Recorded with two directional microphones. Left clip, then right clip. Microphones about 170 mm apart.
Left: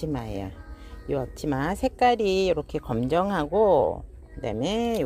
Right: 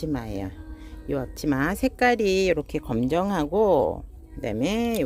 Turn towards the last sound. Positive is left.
turn(degrees=-25)  # may be behind; listen again after turning